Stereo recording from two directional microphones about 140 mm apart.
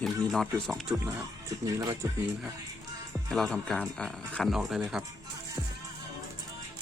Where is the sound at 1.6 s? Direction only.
25° right (ahead or behind).